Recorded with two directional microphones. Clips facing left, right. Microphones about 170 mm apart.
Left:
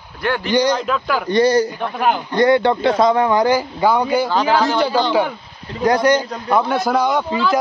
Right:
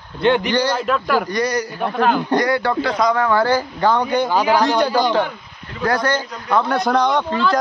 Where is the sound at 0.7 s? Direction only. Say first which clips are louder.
Right 1 dB; centre (ahead or behind).